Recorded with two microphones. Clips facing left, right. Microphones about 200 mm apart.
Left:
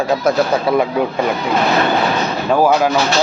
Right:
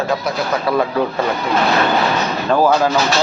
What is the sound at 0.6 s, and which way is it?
Speech, 20° left (ahead or behind).